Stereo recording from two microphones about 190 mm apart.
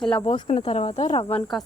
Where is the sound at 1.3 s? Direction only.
Centre (ahead or behind).